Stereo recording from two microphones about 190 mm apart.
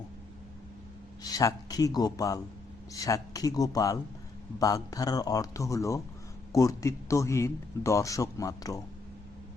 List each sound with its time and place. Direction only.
1.2 s speech: 20° left (ahead or behind)